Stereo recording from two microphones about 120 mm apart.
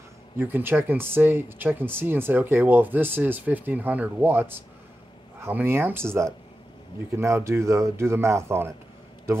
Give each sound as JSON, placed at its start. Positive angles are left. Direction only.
{"t": 0.4, "sound": "speech", "side_deg": -15}